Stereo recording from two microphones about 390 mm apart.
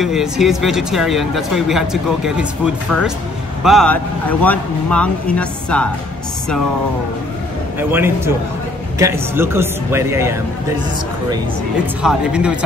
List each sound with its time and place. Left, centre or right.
0.0 s speech: centre
7.9 s speech: centre
12.0 s speech: centre